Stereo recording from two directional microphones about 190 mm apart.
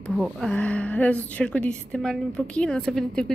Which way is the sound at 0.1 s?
Centre (ahead or behind).